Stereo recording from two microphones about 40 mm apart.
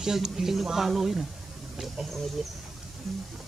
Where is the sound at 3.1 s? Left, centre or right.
Centre.